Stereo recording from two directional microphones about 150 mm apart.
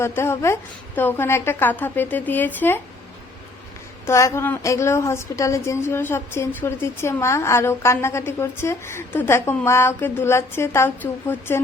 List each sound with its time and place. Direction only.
0.0 s a woman's voice: 15° left (ahead or behind)
4.0 s a woman's voice: 20° left (ahead or behind)